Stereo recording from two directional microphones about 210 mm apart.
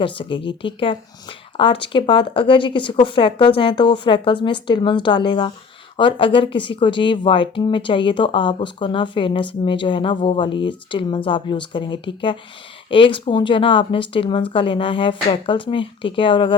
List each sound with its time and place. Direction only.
0.0 s a woman's voice: 25° left (ahead or behind)